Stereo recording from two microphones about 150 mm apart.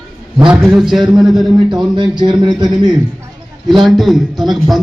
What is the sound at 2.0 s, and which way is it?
Speech, 30° right (ahead or behind).